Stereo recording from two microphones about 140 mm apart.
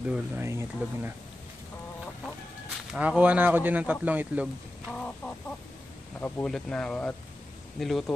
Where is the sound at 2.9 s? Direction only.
10° right (ahead or behind).